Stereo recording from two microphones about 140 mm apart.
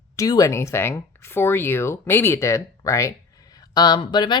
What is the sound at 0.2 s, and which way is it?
Speech, 25° left (ahead or behind).